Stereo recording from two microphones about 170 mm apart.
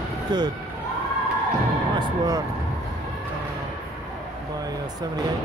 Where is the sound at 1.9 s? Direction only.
20° right (ahead or behind).